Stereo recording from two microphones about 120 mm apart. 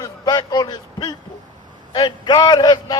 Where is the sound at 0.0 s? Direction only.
35° left (ahead or behind).